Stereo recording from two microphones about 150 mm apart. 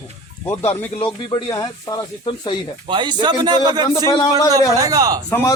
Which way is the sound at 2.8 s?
30° right (ahead or behind).